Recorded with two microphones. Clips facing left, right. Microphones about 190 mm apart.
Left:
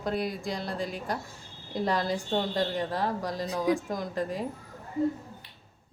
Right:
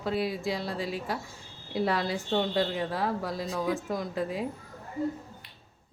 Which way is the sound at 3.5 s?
20° left (ahead or behind).